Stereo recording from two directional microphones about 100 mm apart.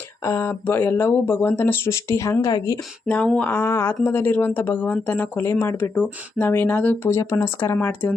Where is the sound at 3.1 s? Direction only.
10° left (ahead or behind).